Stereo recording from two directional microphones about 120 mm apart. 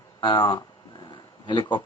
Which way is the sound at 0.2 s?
45° left (ahead or behind).